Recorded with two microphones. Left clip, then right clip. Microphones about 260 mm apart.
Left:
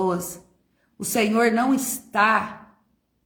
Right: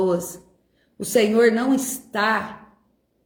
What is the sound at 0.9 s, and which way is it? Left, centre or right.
Speech, centre.